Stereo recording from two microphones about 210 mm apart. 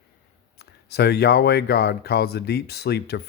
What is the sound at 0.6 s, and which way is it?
Speech, 50° left (ahead or behind).